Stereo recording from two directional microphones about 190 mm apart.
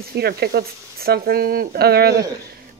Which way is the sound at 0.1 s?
55° right (ahead or behind).